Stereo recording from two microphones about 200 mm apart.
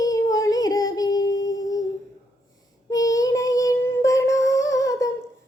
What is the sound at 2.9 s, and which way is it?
Child singing, 15° left (ahead or behind).